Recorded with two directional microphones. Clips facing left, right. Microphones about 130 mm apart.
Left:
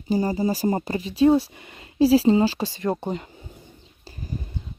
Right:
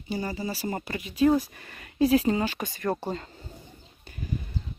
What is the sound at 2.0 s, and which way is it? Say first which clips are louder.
Speech: left 6 dB; 30° left (ahead or behind).